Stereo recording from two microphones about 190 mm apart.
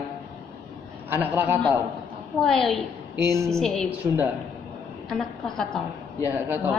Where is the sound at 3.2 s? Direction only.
15° right (ahead or behind).